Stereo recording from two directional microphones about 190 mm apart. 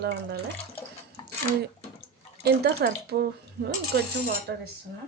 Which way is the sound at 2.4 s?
60° right (ahead or behind).